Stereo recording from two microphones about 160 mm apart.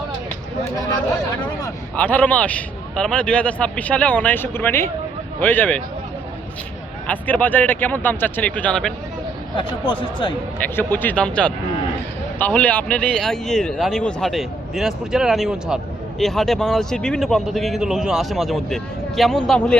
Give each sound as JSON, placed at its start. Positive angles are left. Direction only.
{"t": 2.0, "sound": "a man's voice", "side_deg": 10}
{"t": 7.1, "sound": "a man's voice", "side_deg": 10}
{"t": 9.6, "sound": "speech", "side_deg": 30}
{"t": 10.6, "sound": "a man's voice", "side_deg": 15}